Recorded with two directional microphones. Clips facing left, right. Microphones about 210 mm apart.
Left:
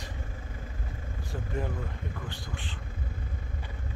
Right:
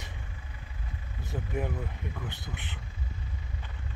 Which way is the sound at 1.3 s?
15° right (ahead or behind).